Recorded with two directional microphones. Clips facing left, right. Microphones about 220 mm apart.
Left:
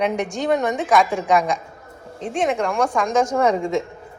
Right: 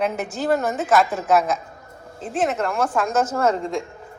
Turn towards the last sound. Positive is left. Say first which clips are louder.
# left 3 dB
turn(degrees=0)  # may be behind; listen again after turning